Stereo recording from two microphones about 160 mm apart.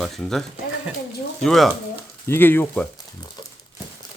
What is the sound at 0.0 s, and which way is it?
Speech, 5° left (ahead or behind).